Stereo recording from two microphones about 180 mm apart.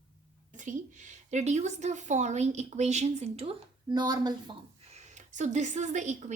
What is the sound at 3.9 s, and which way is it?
Speech, 25° right (ahead or behind).